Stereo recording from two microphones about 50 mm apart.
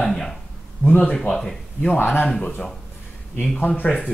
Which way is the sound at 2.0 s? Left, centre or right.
Left.